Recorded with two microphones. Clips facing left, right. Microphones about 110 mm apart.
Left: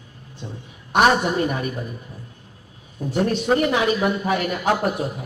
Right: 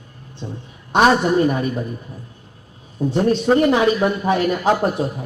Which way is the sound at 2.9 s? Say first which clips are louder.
Right 4 dB; 30° right (ahead or behind).